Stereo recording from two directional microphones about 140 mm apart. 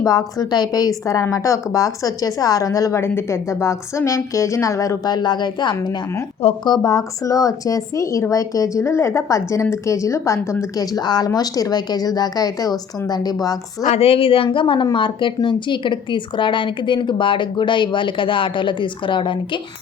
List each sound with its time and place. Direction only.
0.0 s a woman's voice: 25° left (ahead or behind)
13.8 s a woman's voice: 50° left (ahead or behind)